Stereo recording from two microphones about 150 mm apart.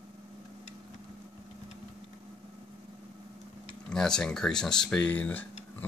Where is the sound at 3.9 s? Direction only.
5° left (ahead or behind).